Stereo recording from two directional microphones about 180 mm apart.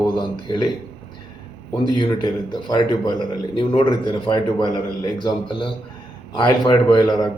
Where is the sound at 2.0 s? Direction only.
25° left (ahead or behind).